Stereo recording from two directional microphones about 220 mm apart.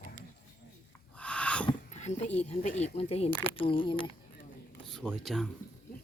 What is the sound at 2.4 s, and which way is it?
Speech, 30° left (ahead or behind).